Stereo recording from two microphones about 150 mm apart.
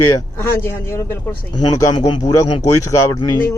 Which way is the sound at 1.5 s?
30° left (ahead or behind).